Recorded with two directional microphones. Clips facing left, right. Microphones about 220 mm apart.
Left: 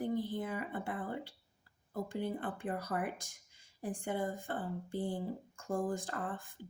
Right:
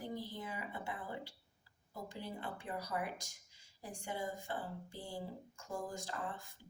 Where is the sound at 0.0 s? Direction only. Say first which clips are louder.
Left 8 dB; 55° left (ahead or behind).